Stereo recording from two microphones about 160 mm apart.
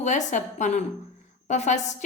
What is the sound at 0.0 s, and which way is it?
A woman's voice, 45° left (ahead or behind).